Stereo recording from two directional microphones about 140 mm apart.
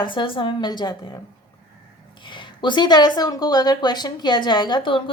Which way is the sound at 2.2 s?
35° left (ahead or behind).